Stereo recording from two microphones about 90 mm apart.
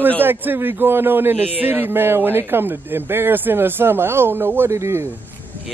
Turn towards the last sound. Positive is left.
turn(degrees=-30)  # may be behind; listen again after turning